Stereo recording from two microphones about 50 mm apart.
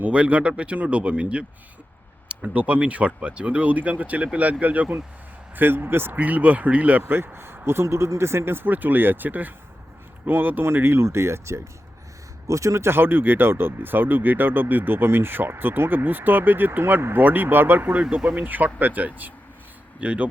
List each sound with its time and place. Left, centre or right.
0.0 s speech: right
5.5 s speech: right
6.1 s speech: right
7.3 s speech: right
8.6 s speech: right
12.5 s speech: right